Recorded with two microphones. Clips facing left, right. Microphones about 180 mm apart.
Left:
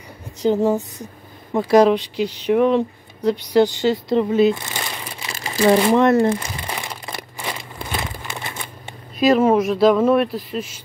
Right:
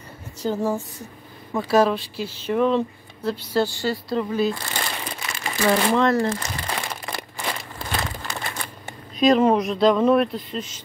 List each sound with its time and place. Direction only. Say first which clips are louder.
0.4 s speech: left 6 dB; 20° left (ahead or behind)
4.6 s crumpling: even; 5° left (ahead or behind)
5.2 s crumpling: left 6 dB; 25° left (ahead or behind)
5.8 s speech: left 5 dB; 20° left (ahead or behind)
6.4 s crumpling: even; 10° left (ahead or behind)
9.2 s speech: left 2 dB; 5° left (ahead or behind)